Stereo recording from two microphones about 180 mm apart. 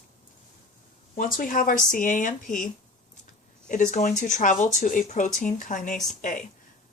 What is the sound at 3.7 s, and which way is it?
Speech, 45° left (ahead or behind).